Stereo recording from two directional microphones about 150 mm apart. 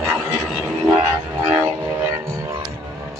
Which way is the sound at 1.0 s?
15° right (ahead or behind).